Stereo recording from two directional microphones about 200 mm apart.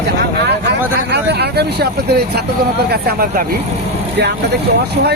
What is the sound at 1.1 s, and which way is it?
Speech, 55° right (ahead or behind).